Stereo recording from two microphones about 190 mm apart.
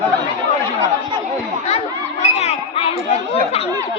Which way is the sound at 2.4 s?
30° left (ahead or behind).